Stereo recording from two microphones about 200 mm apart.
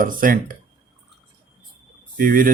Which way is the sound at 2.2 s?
45° right (ahead or behind).